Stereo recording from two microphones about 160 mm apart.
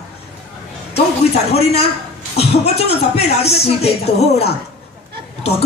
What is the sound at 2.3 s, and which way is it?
Speech, 40° left (ahead or behind).